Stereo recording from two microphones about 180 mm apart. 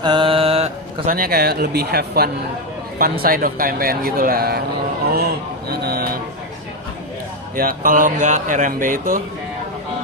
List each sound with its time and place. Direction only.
0.0 s mantra: 25° right (ahead or behind)
1.0 s speech: 50° right (ahead or behind)
5.6 s speech: 60° right (ahead or behind)
7.5 s speech: 50° right (ahead or behind)